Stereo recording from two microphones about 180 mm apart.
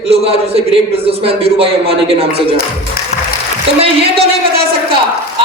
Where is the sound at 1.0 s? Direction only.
30° right (ahead or behind).